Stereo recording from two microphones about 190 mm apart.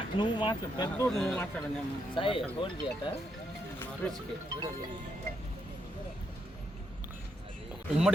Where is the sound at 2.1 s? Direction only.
25° left (ahead or behind).